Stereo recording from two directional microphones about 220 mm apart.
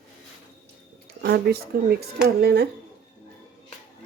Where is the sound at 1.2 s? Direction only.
45° right (ahead or behind).